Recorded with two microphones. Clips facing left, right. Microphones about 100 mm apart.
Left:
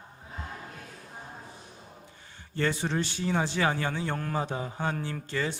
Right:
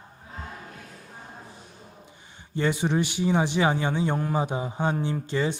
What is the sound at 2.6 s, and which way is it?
A man's voice, 15° right (ahead or behind).